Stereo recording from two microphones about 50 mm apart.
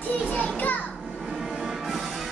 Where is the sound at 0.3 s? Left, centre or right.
Left.